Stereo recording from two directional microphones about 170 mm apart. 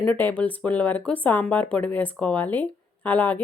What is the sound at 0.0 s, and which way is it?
Speech, 10° left (ahead or behind).